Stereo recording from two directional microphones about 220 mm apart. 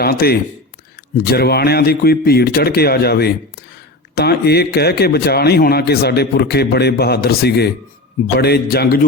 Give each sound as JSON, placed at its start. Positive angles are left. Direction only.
{"t": 0.0, "sound": "a man's voice", "side_deg": 45}